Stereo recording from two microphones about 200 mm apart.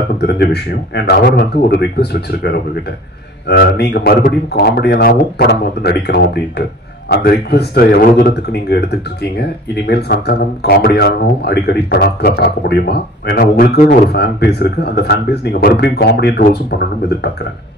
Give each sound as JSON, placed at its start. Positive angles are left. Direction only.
{"t": 0.2, "sound": "speech", "side_deg": 55}